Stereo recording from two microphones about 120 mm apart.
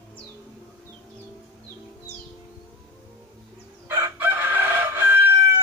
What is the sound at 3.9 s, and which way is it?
Chicken, 15° right (ahead or behind).